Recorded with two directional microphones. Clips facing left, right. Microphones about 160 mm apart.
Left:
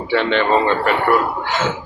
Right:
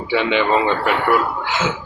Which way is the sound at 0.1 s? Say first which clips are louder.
Left 1 dB; 10° right (ahead or behind).